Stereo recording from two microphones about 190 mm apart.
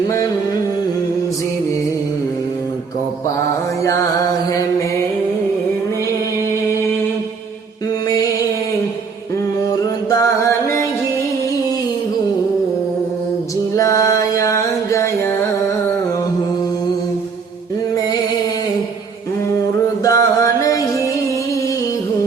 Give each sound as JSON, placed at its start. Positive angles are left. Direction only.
{"t": 13.7, "sound": "music", "side_deg": 15}
{"t": 20.1, "sound": "music", "side_deg": 20}